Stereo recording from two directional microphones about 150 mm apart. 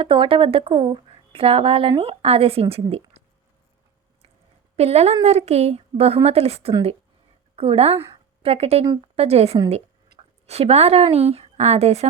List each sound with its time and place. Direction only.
0.0 s speech: 35° right (ahead or behind)
2.9 s a sound: 40° right (ahead or behind)
4.8 s a woman's voice: 45° right (ahead or behind)